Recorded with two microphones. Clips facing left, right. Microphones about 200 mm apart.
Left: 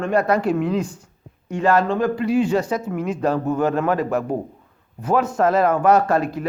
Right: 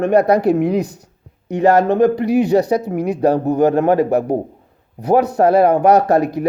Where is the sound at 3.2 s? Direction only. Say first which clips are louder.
Right 7 dB; 35° right (ahead or behind).